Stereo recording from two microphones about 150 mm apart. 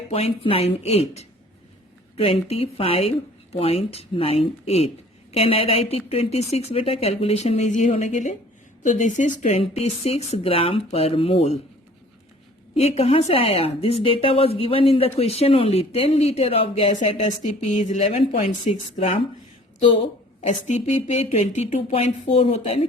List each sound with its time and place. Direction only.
0.1 s a woman's voice: 40° left (ahead or behind)
12.7 s a woman's voice: 45° left (ahead or behind)